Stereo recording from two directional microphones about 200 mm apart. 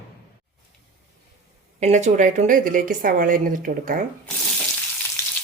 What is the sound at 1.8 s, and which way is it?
A woman's voice, 35° right (ahead or behind).